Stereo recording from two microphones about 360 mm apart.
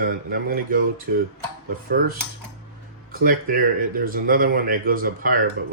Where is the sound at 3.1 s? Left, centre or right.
Right.